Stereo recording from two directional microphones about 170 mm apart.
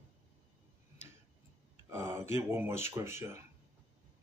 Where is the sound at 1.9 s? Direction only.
15° right (ahead or behind).